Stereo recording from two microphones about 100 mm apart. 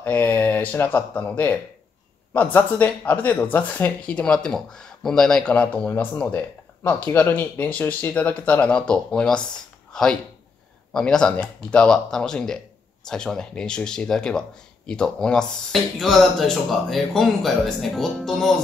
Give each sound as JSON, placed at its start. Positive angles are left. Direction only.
{"t": 0.0, "sound": "speech", "side_deg": 15}
{"t": 5.5, "sound": "speech", "side_deg": 15}